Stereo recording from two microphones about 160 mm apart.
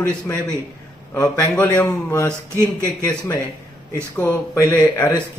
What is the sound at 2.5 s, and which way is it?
Speech, 15° right (ahead or behind).